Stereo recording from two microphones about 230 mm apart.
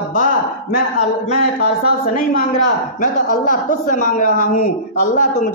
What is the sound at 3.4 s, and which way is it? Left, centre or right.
A woman's voice, left.